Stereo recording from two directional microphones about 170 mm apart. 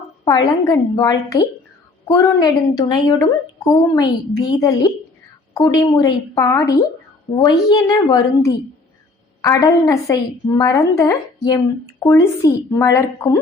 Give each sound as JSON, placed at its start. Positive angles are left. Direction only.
{"t": 0.3, "sound": "a woman's voice", "side_deg": 20}